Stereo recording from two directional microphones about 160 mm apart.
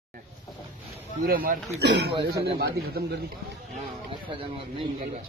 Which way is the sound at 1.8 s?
90° right.